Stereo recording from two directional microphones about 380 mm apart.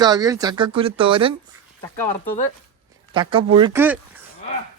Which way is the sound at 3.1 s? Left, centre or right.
Centre.